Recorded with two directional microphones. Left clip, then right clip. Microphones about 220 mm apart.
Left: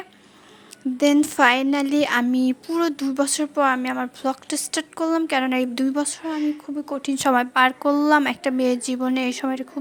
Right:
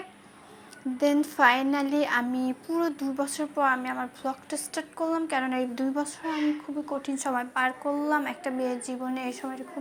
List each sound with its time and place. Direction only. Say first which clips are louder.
0.9 s speech: left 6 dB; 40° left (ahead or behind)